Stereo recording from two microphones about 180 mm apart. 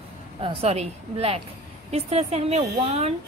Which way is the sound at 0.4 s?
30° right (ahead or behind).